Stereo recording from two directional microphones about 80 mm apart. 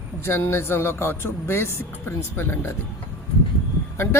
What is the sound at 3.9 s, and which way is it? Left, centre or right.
Speech, left.